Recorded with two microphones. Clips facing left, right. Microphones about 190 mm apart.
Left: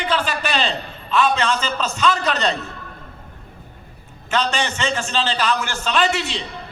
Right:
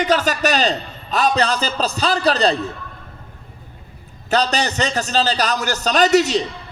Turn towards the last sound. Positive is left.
turn(degrees=-40)  # may be behind; listen again after turning